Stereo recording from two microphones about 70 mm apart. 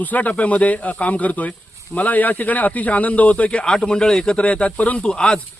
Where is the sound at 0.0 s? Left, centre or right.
Left.